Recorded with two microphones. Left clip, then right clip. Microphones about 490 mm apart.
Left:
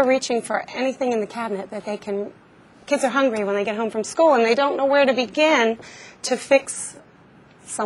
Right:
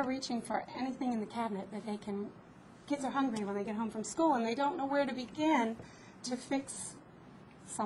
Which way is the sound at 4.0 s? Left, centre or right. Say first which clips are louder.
Left 15 dB; left.